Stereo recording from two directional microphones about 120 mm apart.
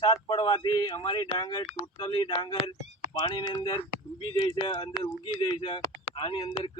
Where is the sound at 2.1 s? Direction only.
40° left (ahead or behind).